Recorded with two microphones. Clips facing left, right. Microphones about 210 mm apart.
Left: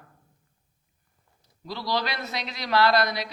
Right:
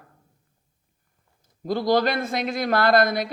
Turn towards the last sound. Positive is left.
turn(degrees=-50)  # may be behind; listen again after turning